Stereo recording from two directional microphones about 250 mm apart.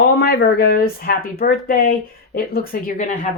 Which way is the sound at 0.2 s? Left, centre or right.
Left.